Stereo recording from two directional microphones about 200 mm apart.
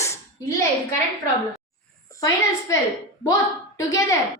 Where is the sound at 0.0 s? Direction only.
15° left (ahead or behind).